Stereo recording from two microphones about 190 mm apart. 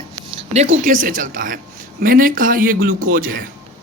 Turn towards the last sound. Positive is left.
turn(degrees=-45)  # may be behind; listen again after turning